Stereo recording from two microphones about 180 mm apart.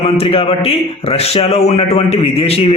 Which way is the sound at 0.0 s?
30° left (ahead or behind).